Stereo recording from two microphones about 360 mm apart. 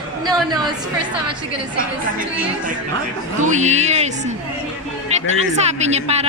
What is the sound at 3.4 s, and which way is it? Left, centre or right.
Speech, centre.